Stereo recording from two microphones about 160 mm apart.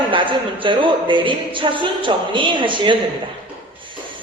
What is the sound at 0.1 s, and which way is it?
Speech, 30° right (ahead or behind).